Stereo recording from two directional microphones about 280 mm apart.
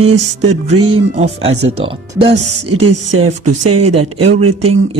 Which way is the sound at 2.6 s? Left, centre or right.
Right.